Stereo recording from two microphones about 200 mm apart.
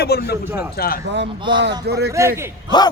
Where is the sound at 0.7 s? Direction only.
50° left (ahead or behind).